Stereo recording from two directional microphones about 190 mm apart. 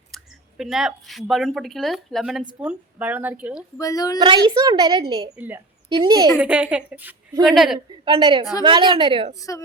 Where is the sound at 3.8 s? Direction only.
20° left (ahead or behind).